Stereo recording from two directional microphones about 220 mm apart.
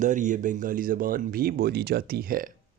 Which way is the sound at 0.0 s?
35° right (ahead or behind).